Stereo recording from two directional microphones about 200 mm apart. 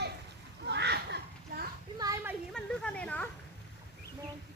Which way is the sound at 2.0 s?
15° right (ahead or behind).